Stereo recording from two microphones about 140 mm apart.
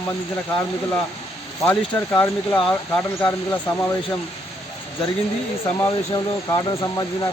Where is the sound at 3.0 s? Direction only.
15° left (ahead or behind).